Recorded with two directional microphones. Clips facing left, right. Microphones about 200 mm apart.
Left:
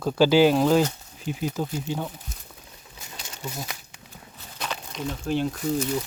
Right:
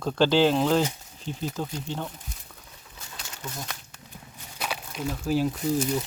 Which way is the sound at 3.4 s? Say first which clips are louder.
Left 3 dB; 10° left (ahead or behind).